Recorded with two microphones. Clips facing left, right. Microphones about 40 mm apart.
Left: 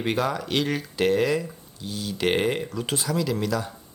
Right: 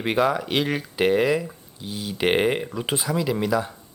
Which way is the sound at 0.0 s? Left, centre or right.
Centre.